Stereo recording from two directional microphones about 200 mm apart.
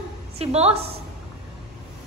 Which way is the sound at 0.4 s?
30° right (ahead or behind).